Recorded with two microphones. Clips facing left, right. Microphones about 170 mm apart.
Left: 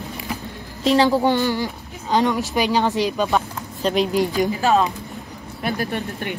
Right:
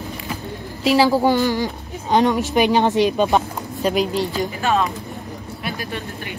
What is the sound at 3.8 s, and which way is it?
Speech, centre (ahead or behind).